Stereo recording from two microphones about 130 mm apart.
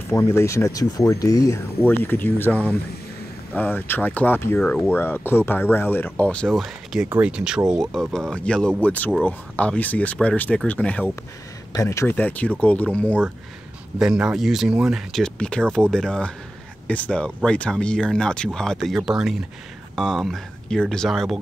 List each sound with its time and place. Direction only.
0.1 s speech: 20° left (ahead or behind)
1.8 s speech: 15° left (ahead or behind)
11.7 s speech: 25° left (ahead or behind)
13.9 s speech: 5° right (ahead or behind)